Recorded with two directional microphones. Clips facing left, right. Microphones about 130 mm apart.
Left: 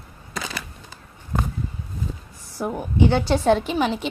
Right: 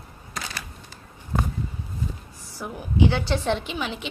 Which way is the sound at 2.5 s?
50° left (ahead or behind).